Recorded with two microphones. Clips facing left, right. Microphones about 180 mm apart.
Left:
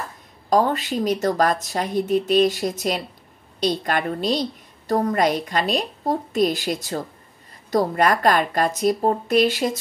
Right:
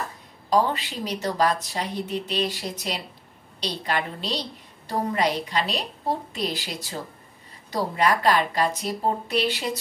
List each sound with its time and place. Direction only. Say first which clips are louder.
0.5 s a woman's voice: left 3 dB; 45° left (ahead or behind)